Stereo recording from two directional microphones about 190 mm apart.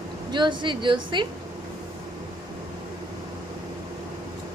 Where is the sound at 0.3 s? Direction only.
25° right (ahead or behind).